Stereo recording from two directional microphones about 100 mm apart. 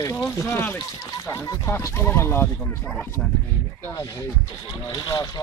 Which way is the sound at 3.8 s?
30° left (ahead or behind).